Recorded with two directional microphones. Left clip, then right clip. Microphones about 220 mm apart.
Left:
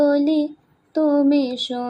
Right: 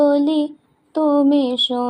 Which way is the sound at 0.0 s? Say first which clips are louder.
Right 2 dB; 20° right (ahead or behind).